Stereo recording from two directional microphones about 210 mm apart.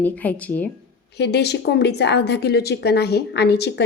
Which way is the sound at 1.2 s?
50° left (ahead or behind).